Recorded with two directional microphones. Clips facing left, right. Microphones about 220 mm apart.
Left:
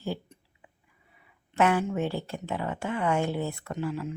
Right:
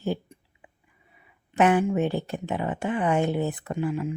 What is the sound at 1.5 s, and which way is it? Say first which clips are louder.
Speech: right 4 dB; 20° right (ahead or behind).